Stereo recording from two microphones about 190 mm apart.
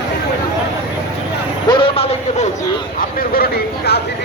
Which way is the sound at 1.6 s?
25° left (ahead or behind).